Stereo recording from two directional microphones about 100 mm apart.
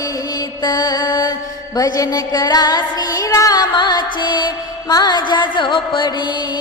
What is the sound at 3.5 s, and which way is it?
Music, 45° left (ahead or behind).